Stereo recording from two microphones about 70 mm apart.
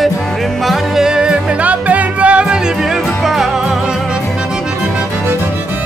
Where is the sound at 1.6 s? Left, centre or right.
Right; by 3.7 s centre.